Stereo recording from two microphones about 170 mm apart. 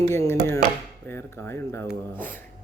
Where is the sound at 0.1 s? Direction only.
15° left (ahead or behind).